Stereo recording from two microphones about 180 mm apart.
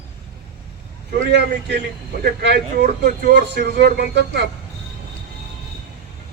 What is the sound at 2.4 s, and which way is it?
Speech, 65° right (ahead or behind).